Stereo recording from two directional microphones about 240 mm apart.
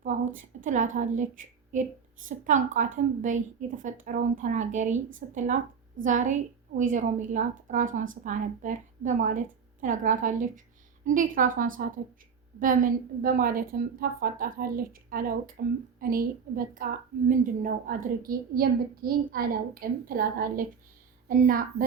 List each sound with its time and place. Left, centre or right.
0.3 s a woman's voice: right